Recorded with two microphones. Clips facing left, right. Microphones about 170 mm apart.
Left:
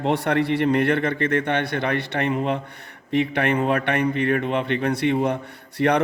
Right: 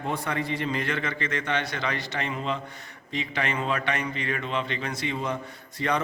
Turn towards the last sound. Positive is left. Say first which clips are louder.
# left 8 dB
turn(degrees=65)  # may be behind; listen again after turning